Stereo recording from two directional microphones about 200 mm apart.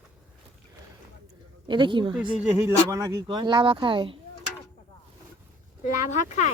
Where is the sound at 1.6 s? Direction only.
25° right (ahead or behind).